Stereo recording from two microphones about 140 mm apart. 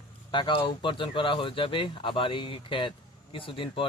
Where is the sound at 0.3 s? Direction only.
35° left (ahead or behind).